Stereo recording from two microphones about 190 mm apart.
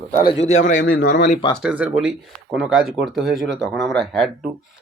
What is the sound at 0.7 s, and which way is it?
Speech, 85° left.